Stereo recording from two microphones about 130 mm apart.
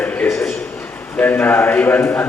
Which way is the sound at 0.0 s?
15° left (ahead or behind).